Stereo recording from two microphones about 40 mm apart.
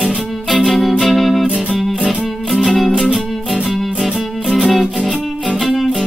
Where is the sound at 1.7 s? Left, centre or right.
Centre.